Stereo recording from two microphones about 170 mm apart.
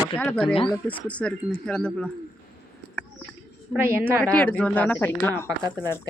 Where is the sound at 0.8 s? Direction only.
5° left (ahead or behind).